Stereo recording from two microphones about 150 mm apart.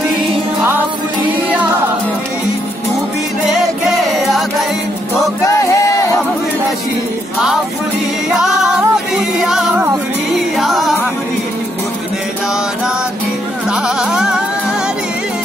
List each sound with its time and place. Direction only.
4.3 s music: centre (ahead or behind)
5.5 s music: 20° left (ahead or behind)
8.4 s music: 5° right (ahead or behind)
13.7 s music: 5° right (ahead or behind)